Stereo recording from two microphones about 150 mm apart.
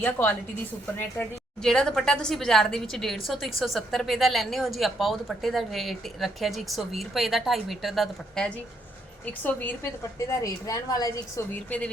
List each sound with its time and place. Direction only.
0.0 s a woman's voice: 15° left (ahead or behind)
9.4 s a woman's voice: 15° left (ahead or behind)